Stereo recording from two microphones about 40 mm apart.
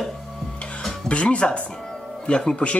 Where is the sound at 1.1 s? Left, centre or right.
Left.